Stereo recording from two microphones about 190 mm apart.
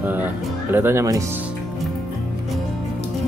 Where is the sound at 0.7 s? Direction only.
15° right (ahead or behind).